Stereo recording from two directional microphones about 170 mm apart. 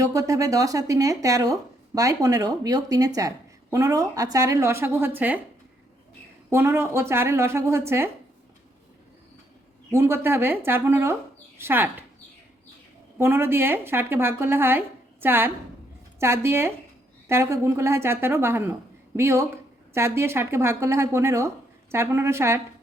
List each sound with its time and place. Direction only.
0.0 s a woman's voice: 20° right (ahead or behind)
6.5 s a woman's voice: 15° right (ahead or behind)
9.9 s a woman's voice: 15° right (ahead or behind)
13.1 s a woman's voice: 15° right (ahead or behind)